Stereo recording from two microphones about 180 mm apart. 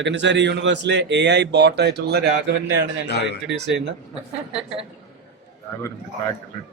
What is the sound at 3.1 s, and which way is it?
Speech, 70° left (ahead or behind).